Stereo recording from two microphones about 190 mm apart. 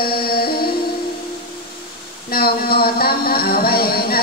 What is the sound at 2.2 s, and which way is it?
Music, 55° left (ahead or behind).